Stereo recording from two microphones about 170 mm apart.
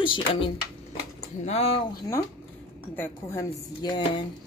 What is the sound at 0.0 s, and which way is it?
Speech, 30° left (ahead or behind).